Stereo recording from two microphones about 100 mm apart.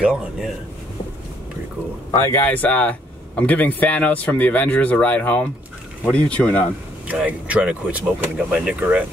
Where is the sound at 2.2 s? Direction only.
20° left (ahead or behind).